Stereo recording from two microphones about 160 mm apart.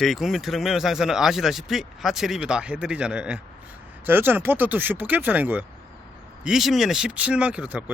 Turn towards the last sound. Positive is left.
turn(degrees=-10)  # may be behind; listen again after turning